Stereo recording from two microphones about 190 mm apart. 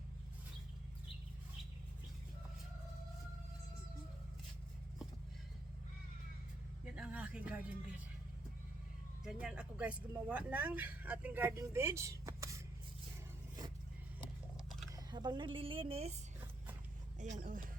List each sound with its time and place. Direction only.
6.9 s speech: 5° right (ahead or behind)
9.2 s speech: 5° right (ahead or behind)
14.8 s speech: 20° right (ahead or behind)
17.2 s speech: 40° right (ahead or behind)